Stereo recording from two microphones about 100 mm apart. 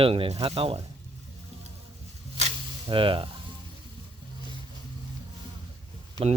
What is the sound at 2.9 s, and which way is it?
Speech, 55° right (ahead or behind).